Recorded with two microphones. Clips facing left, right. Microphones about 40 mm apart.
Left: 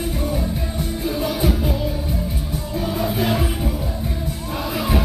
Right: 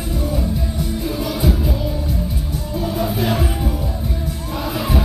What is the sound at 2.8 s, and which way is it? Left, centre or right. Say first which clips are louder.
Music: right 2 dB; centre.